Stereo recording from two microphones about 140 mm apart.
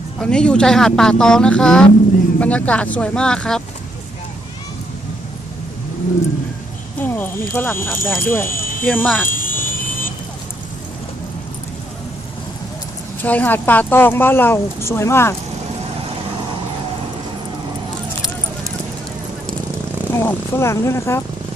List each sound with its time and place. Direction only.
0.2 s a woman's voice: 5° left (ahead or behind)
7.0 s a woman's voice: 15° left (ahead or behind)
8.5 s a sound: 85° left
8.8 s a woman's voice: 15° left (ahead or behind)
9.3 s vehicle: 75° left (ahead or behind)
13.2 s a woman's voice: 10° left (ahead or behind)
20.1 s speech: 20° left (ahead or behind)